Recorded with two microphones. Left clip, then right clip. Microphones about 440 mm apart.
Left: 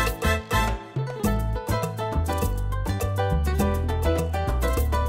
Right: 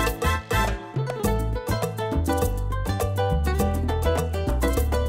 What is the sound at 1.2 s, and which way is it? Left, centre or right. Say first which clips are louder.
Music: right 1 dB; right.